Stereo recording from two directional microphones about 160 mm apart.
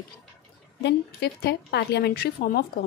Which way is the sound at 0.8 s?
90° left.